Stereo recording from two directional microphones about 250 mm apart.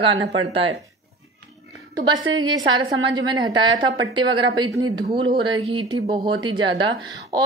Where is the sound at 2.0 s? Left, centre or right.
Centre.